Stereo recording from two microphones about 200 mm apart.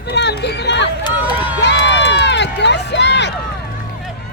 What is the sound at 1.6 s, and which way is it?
Run, 60° left (ahead or behind).